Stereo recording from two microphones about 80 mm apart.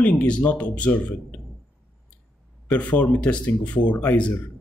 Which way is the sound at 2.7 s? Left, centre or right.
Centre.